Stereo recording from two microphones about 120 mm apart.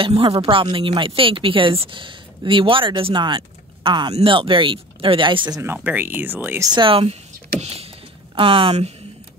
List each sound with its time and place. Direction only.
0.0 s speech: 50° right (ahead or behind)
5.5 s speech: 20° right (ahead or behind)
6.6 s speech: 40° right (ahead or behind)
7.6 s vehicle: 55° right (ahead or behind)
8.4 s speech: 45° right (ahead or behind)